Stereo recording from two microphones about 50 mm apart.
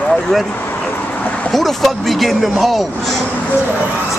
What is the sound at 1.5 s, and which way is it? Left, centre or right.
Speech, centre.